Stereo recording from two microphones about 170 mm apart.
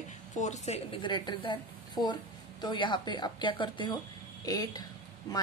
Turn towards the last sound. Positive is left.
turn(degrees=20)  # may be behind; listen again after turning